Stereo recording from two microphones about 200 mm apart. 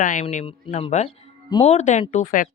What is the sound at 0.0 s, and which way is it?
Speech, 40° left (ahead or behind).